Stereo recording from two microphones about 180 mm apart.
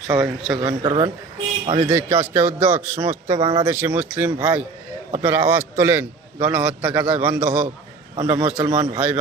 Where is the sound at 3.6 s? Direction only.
10° right (ahead or behind).